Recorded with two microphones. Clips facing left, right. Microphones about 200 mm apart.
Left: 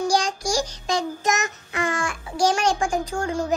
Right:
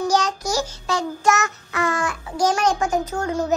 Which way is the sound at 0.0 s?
10° left (ahead or behind).